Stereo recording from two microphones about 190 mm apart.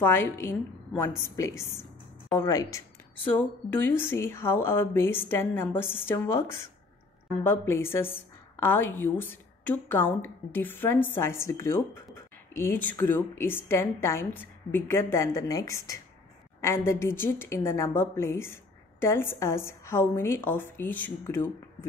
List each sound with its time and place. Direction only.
0.0 s a woman's voice: 10° left (ahead or behind)